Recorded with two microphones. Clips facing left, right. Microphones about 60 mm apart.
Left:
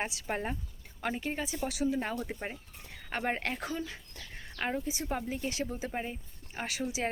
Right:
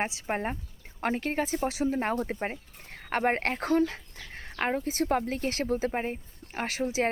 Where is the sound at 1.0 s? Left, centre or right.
Right.